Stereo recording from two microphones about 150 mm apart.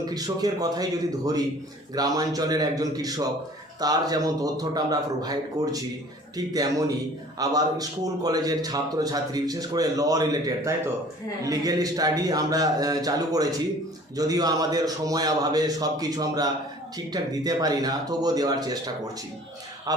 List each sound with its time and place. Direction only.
0.0 s a man's voice: 25° right (ahead or behind)